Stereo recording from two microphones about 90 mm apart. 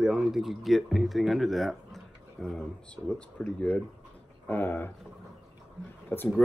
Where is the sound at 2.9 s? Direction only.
15° left (ahead or behind).